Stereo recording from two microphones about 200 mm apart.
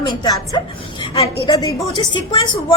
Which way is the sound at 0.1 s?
20° left (ahead or behind).